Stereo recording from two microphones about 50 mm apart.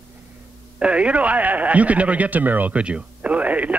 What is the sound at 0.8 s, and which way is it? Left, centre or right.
Speech, right.